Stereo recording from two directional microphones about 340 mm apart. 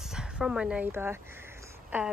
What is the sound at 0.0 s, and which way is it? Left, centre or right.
A woman's voice, centre.